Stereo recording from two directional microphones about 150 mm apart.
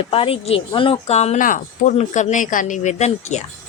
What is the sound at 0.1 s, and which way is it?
Speech, 40° left (ahead or behind).